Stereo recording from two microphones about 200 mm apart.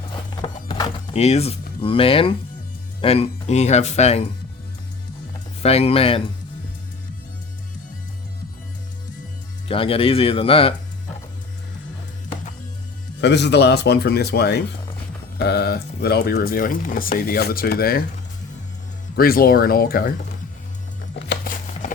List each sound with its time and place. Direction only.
0.4 s music: 25° left (ahead or behind)
3.0 s speech: 30° left (ahead or behind)
5.6 s speech: 30° left (ahead or behind)
9.6 s speech: 25° left (ahead or behind)
13.2 s speech: 60° left (ahead or behind)
19.1 s speech: 45° left (ahead or behind)
21.2 s a sound: 45° left (ahead or behind)